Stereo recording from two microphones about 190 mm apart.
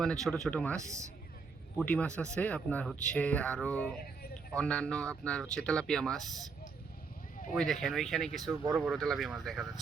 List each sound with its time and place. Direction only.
0.0 s speech: 5° left (ahead or behind)
7.5 s speech: centre (ahead or behind)